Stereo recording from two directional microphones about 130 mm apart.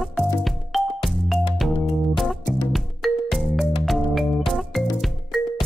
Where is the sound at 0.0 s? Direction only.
Centre (ahead or behind).